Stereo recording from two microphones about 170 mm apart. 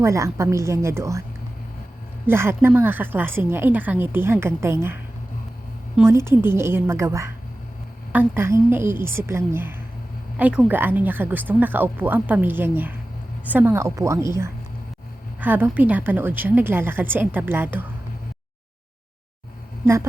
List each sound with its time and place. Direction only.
0.0 s a woman's voice: 15° right (ahead or behind)
2.2 s a woman's voice: 15° right (ahead or behind)
6.1 s a woman's voice: 15° right (ahead or behind)